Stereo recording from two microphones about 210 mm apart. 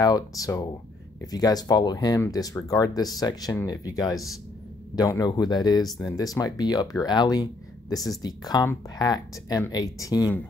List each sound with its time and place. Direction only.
0.0 s speech: 15° left (ahead or behind)